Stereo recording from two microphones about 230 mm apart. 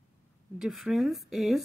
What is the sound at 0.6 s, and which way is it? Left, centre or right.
A woman's voice, centre.